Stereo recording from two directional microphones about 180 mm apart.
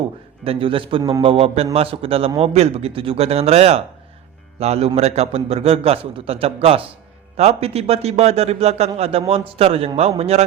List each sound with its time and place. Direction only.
0.4 s a man's voice: 30° right (ahead or behind)